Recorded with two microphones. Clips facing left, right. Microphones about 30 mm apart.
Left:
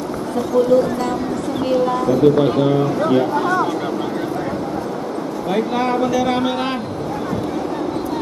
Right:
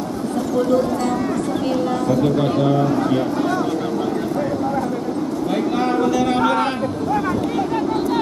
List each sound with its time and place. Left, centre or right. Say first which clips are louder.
1.7 s speech: left 5 dB; centre
5.8 s speech: right 1 dB; centre